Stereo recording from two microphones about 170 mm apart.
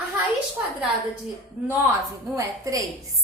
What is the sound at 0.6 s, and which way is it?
Speech, 15° right (ahead or behind).